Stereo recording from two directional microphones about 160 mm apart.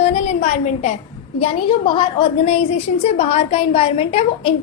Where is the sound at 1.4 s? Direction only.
30° left (ahead or behind).